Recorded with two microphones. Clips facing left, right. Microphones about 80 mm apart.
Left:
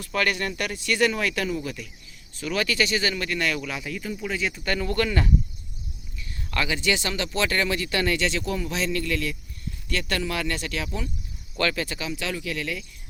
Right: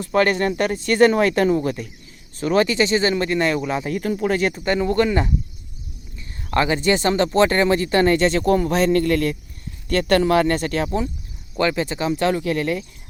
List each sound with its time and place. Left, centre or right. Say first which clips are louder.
0.0 s speech: right 8 dB; right
4.6 s speech: right 5 dB; right
11.5 s speech: right 6 dB; right
12.0 s speech: right 10 dB; right